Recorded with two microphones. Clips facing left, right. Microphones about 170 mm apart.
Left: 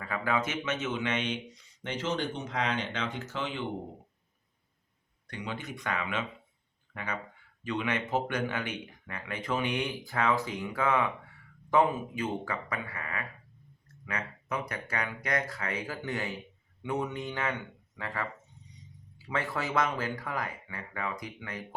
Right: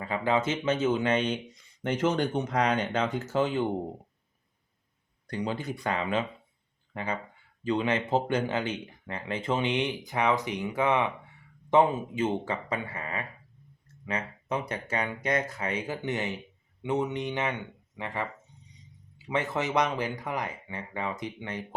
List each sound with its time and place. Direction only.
0.0 s speech: 25° right (ahead or behind); by 3.7 s 45° right (ahead or behind)
5.3 s speech: 35° right (ahead or behind)